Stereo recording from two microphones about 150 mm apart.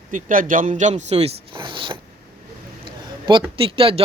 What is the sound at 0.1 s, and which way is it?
Speech, 65° right (ahead or behind).